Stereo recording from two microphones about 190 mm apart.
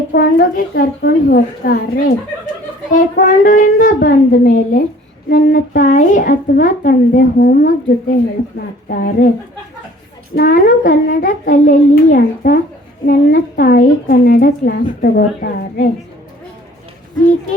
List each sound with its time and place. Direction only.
0.1 s a woman's voice: 50° left (ahead or behind)
10.3 s a woman's voice: 50° left (ahead or behind)